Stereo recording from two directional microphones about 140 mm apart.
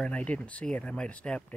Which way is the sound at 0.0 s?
10° left (ahead or behind).